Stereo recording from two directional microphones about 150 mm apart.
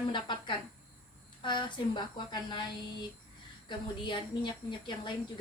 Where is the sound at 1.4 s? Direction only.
30° left (ahead or behind).